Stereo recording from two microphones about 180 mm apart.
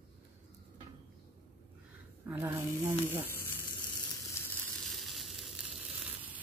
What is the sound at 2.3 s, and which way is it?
Snake, 10° right (ahead or behind).